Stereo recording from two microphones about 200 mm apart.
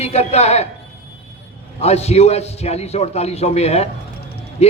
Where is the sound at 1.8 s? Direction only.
30° left (ahead or behind).